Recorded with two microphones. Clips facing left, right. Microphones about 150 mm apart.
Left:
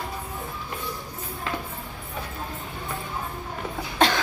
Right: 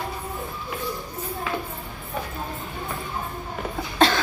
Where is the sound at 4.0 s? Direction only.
15° left (ahead or behind).